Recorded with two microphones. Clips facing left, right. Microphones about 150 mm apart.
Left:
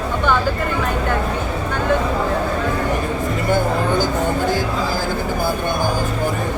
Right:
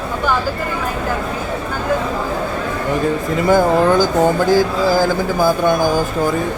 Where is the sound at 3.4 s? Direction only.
90° right.